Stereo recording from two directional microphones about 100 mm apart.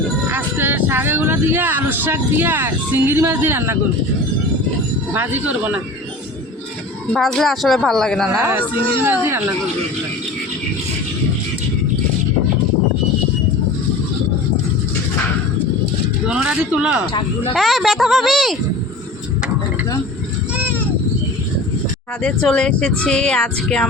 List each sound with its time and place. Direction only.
0.3 s speech: 15° right (ahead or behind)
5.1 s a man's voice: 15° right (ahead or behind)
7.1 s a woman's voice: 5° left (ahead or behind)
8.3 s speech: 25° right (ahead or behind)
16.2 s a man's voice: 10° right (ahead or behind)
17.5 s a woman's voice: centre (ahead or behind)
20.6 s goat: 20° right (ahead or behind)
22.2 s speech: 10° left (ahead or behind)